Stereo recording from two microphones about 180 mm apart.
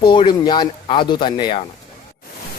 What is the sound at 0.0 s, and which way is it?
Speech, 30° left (ahead or behind).